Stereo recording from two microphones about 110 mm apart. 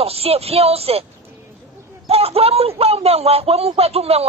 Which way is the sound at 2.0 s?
65° right (ahead or behind).